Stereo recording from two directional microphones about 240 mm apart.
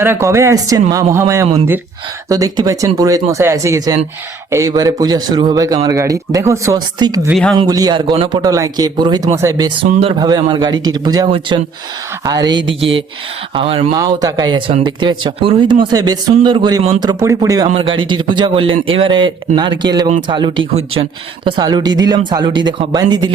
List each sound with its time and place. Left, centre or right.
0.0 s a man's voice: centre
7.3 s speech: centre
7.5 s a man's voice: centre
12.6 s mantra: right
13.5 s a man's voice: right